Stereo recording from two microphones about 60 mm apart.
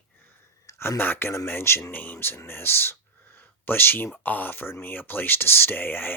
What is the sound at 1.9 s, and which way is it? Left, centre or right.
Speech, left.